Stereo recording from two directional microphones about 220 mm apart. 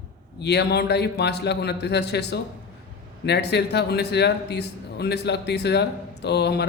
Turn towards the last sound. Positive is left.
turn(degrees=50)  # may be behind; listen again after turning